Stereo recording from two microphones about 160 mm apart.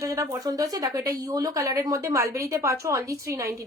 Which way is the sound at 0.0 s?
20° right (ahead or behind).